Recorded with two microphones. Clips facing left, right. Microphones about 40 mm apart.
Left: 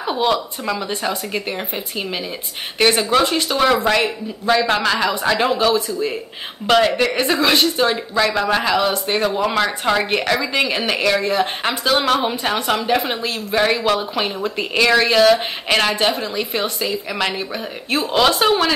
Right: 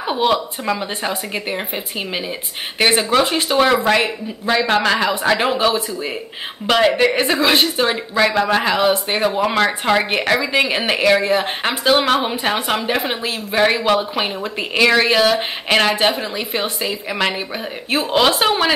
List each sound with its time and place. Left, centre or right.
0.0 s speech: centre